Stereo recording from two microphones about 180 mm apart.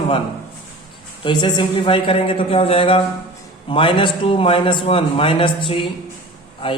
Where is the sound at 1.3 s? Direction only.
25° left (ahead or behind).